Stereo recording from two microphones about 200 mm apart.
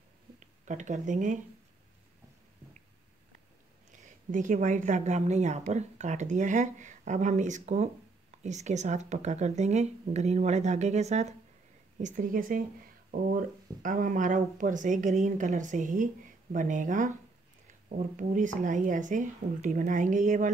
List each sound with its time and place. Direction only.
0.4 s speech: 40° right (ahead or behind)
4.3 s a woman's voice: 40° right (ahead or behind)